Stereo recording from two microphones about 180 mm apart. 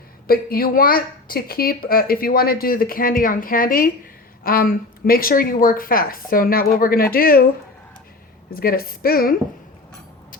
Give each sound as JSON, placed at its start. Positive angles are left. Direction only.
{"t": 0.3, "sound": "a woman's voice", "side_deg": 55}
{"t": 8.4, "sound": "speech", "side_deg": 55}